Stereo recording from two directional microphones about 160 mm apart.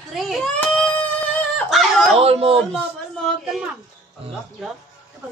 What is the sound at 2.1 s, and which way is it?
Speech, 40° right (ahead or behind).